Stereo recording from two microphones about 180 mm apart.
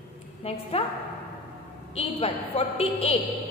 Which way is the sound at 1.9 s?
35° left (ahead or behind).